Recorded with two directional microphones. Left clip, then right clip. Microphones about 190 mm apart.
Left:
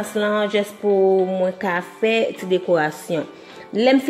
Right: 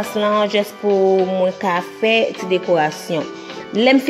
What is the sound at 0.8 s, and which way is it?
A woman's voice, 30° right (ahead or behind).